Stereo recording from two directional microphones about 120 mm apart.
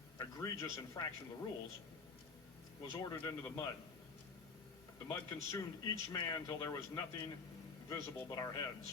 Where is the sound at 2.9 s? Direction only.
40° left (ahead or behind).